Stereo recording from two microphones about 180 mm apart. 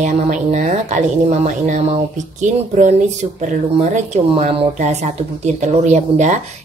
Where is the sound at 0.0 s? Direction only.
40° right (ahead or behind).